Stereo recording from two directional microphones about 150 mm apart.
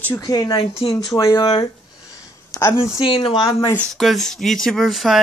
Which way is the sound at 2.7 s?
25° left (ahead or behind).